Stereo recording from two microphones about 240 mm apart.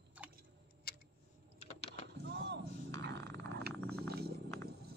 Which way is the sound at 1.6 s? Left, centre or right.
Left.